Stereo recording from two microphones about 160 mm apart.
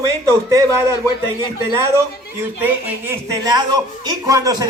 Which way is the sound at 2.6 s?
10° right (ahead or behind).